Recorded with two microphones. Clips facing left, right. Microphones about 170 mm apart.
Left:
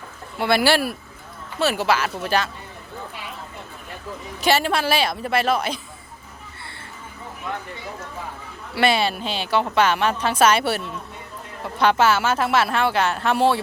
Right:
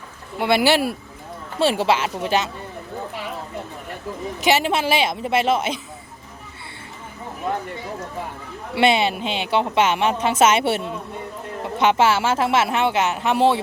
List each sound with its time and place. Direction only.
0.3 s a woman's voice: 15° right (ahead or behind)
4.4 s a woman's voice: 20° right (ahead or behind)
8.7 s a woman's voice: 20° right (ahead or behind)